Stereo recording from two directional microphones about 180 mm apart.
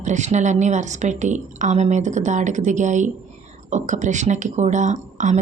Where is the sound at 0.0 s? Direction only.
40° right (ahead or behind).